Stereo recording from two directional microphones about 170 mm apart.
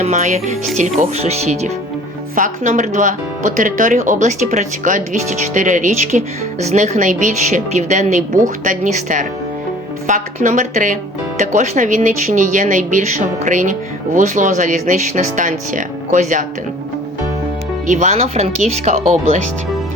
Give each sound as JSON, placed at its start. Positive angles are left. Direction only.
{"t": 0.0, "sound": "speech", "side_deg": -45}
{"t": 17.8, "sound": "speech", "side_deg": -45}